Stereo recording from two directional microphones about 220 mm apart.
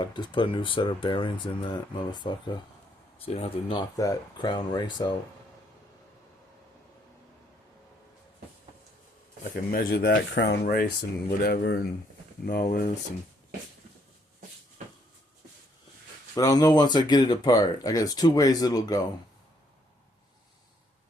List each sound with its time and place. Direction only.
0.0 s speech: 20° left (ahead or behind)
9.4 s speech: 45° left (ahead or behind)
16.3 s speech: 15° left (ahead or behind)